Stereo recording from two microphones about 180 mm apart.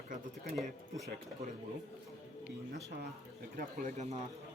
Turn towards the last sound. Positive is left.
turn(degrees=-40)  # may be behind; listen again after turning